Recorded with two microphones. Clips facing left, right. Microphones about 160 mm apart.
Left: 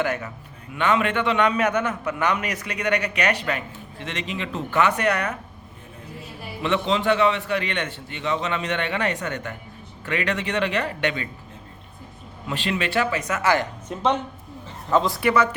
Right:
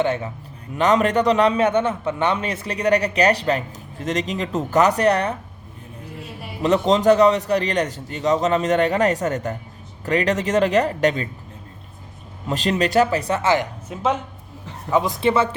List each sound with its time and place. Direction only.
0.0 s speech: 25° right (ahead or behind)
0.7 s a man's voice: 40° right (ahead or behind)
6.6 s a man's voice: 40° right (ahead or behind)
12.5 s a man's voice: 40° right (ahead or behind); by 13.7 s 25° right (ahead or behind)
13.8 s speech: 5° right (ahead or behind); by 15.4 s 25° right (ahead or behind)